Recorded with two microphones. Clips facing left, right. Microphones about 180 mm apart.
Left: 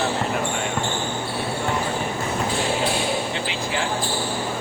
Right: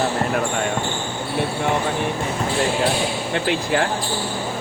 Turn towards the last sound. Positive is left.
turn(degrees=-55)  # may be behind; listen again after turning